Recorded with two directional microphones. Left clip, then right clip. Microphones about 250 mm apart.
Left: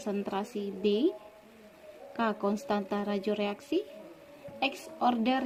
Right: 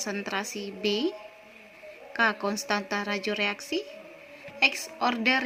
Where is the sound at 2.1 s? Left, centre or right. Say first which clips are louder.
Right 5 dB; centre.